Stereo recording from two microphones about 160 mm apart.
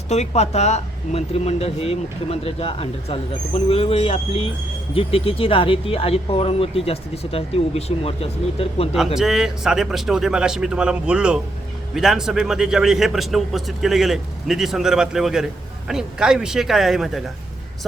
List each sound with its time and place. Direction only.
0.1 s speech: 40° left (ahead or behind)
9.1 s a man's voice: 5° right (ahead or behind)